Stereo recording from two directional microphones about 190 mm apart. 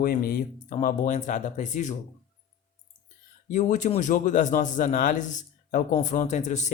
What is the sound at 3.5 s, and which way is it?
A man's voice, 40° left (ahead or behind).